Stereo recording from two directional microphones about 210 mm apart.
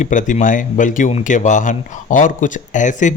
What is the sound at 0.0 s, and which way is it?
A man's voice, 35° left (ahead or behind).